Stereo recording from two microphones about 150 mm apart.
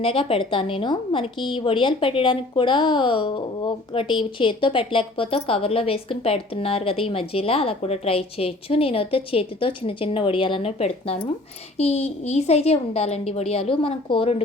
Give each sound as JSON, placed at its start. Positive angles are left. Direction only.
{"t": 0.0, "sound": "a woman's voice", "side_deg": 35}